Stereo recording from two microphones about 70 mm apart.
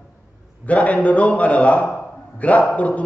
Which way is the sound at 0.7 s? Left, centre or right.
Centre.